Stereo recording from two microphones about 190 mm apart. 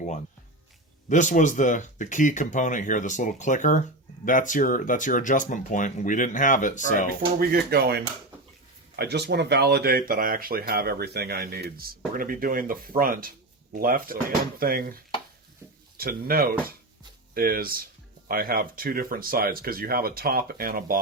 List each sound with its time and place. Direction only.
1.1 s speech: 40° left (ahead or behind)
7.3 s speech: 55° right (ahead or behind)
16.0 s speech: 50° right (ahead or behind)